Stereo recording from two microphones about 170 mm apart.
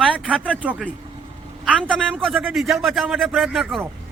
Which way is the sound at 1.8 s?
5° left (ahead or behind).